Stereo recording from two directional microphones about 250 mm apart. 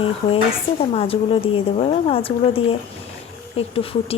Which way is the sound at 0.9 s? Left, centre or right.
Left.